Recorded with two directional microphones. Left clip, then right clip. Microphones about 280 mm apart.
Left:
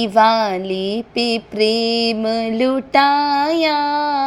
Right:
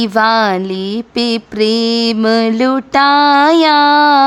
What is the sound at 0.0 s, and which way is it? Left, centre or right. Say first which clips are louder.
Female singing: right 2 dB; centre.